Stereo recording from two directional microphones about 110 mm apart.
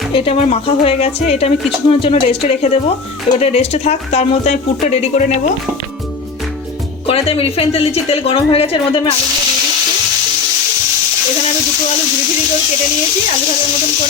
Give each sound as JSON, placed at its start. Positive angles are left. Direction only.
{"t": 0.1, "sound": "speech", "side_deg": 55}
{"t": 7.1, "sound": "speech", "side_deg": 60}